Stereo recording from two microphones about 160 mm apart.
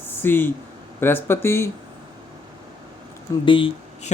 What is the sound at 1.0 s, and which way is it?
Speech, 15° left (ahead or behind).